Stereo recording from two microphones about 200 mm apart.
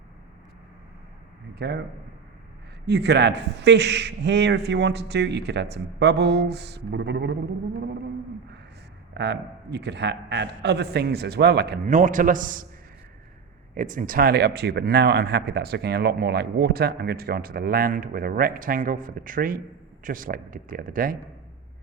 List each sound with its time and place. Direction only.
1.5 s a man's voice: 55° right (ahead or behind)
2.8 s a man's voice: 55° right (ahead or behind)
9.1 s a man's voice: 60° right (ahead or behind)
11.9 s a man's voice: 40° right (ahead or behind)
13.7 s speech: 40° right (ahead or behind)